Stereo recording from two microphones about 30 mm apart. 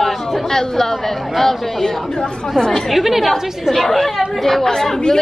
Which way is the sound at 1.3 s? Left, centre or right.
Centre.